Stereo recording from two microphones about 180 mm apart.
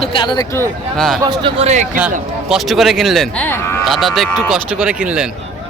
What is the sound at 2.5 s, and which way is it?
Speech, centre (ahead or behind).